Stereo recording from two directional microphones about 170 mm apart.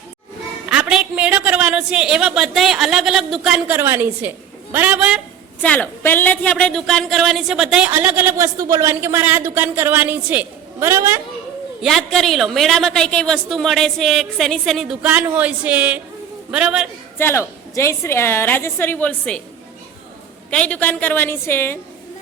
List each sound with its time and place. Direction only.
0.7 s a woman's voice: 5° right (ahead or behind)
5.6 s a woman's voice: 10° left (ahead or behind); by 11.2 s 15° right (ahead or behind)
11.8 s a woman's voice: centre (ahead or behind)
17.2 s a woman's voice: 15° left (ahead or behind)
20.5 s a woman's voice: 5° left (ahead or behind)